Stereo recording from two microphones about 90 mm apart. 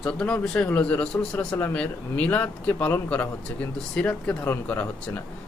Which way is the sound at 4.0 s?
15° left (ahead or behind).